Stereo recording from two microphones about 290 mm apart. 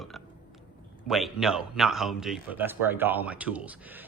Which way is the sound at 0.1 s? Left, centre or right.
Centre.